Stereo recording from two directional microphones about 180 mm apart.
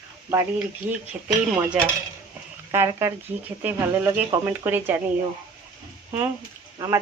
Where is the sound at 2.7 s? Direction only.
15° right (ahead or behind).